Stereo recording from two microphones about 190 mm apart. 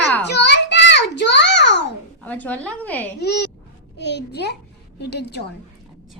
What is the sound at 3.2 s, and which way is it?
A child's voice, 65° left (ahead or behind).